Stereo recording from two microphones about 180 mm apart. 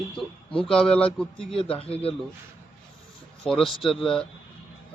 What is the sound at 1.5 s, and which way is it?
Speech, 30° left (ahead or behind).